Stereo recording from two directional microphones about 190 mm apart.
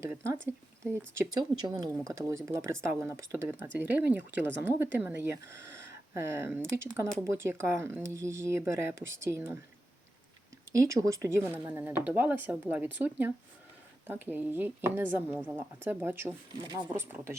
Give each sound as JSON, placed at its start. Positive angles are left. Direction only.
{"t": 0.0, "sound": "speech", "side_deg": -15}
{"t": 10.7, "sound": "speech", "side_deg": -15}
{"t": 16.5, "sound": "speech", "side_deg": -20}